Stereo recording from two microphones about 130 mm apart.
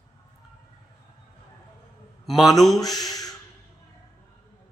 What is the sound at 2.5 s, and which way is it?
Speech, centre (ahead or behind).